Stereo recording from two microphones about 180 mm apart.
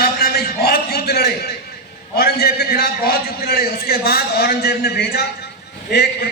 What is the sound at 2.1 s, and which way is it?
A man's voice, 60° left (ahead or behind).